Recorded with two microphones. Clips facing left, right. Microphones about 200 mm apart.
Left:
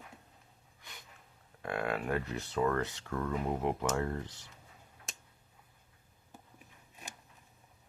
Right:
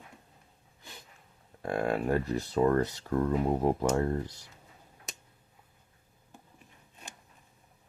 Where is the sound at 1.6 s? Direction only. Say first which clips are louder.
Right 5 dB; 40° right (ahead or behind).